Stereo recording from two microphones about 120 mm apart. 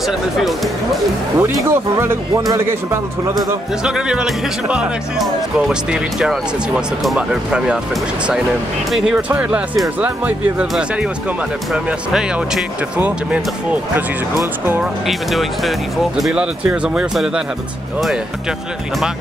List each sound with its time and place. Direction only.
1.7 s speech: 20° right (ahead or behind)
3.3 s speech: 5° right (ahead or behind)
8.9 s speech: 5° right (ahead or behind)
13.9 s speech: 20° right (ahead or behind)
14.8 s speech: centre (ahead or behind)